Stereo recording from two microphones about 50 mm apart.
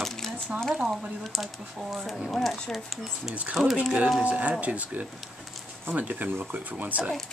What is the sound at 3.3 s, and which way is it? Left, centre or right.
Speech, right.